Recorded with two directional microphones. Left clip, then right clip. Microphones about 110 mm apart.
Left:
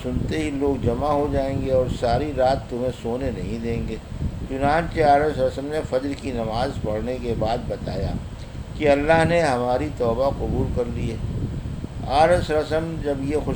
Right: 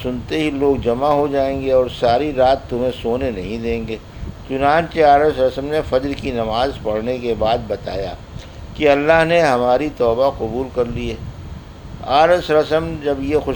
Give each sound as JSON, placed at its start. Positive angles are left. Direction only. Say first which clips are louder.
{"t": 0.0, "sound": "speech", "louder": "right 6 dB", "side_deg": -30}